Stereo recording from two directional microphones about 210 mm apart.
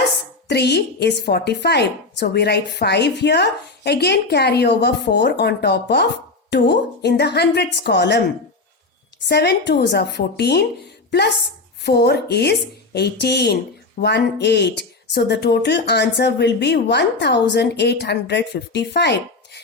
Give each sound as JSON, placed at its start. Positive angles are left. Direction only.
{"t": 0.4, "sound": "speech", "side_deg": 50}
{"t": 9.2, "sound": "speech", "side_deg": 50}
{"t": 11.8, "sound": "speech", "side_deg": 55}